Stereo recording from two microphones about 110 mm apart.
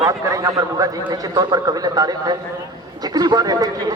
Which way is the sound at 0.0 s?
30° right (ahead or behind).